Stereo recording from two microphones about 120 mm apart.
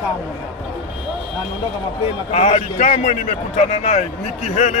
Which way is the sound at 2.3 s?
75° left (ahead or behind).